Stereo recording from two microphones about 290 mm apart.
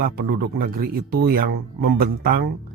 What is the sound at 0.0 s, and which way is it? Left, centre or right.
Speech, right.